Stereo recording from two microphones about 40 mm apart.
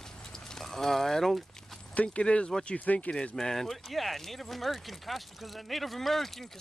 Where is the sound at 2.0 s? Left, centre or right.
Left.